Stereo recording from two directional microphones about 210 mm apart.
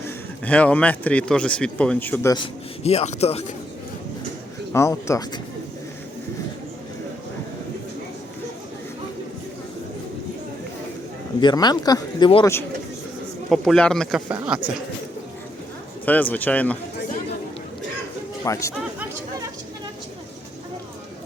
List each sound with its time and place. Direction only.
0.4 s speech: 5° left (ahead or behind)
2.3 s a man's voice: 25° left (ahead or behind)
4.7 s speech: 15° left (ahead or behind)
11.3 s speech: 20° left (ahead or behind)
13.5 s a man's voice: 5° left (ahead or behind)
14.3 s speech: 10° right (ahead or behind)
16.0 s speech: 10° left (ahead or behind)
18.4 s speech: 15° left (ahead or behind)